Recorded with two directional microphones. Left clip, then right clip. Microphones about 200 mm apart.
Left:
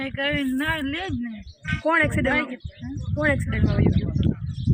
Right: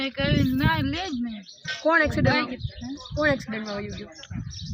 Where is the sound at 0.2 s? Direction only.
10° right (ahead or behind).